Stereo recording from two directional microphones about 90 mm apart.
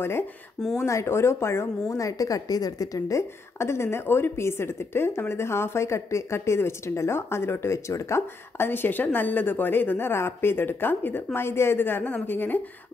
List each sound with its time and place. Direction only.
0.7 s a woman's voice: 30° left (ahead or behind)
1.9 s a woman's voice: 40° left (ahead or behind); by 12.6 s 20° left (ahead or behind)